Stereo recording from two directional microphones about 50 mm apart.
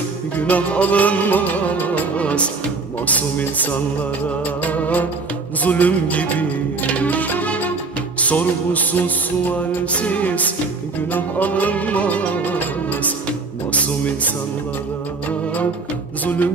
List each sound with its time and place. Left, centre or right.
0.4 s music: left